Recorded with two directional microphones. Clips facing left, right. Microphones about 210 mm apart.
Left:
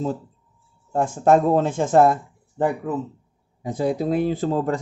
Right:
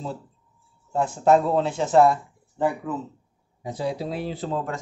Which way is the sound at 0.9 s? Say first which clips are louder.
Left 2 dB; 50° left (ahead or behind).